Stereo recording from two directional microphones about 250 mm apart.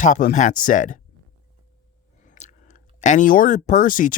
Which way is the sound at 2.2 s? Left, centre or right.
Left.